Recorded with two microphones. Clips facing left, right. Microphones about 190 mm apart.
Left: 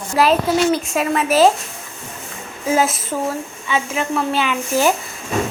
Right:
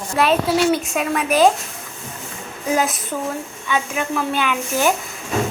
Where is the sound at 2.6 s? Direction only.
5° left (ahead or behind).